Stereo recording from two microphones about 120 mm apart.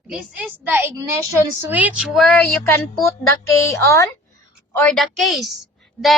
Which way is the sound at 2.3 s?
15° left (ahead or behind).